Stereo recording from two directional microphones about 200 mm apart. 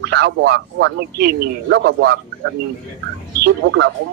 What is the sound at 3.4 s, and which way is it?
Speech, 55° right (ahead or behind).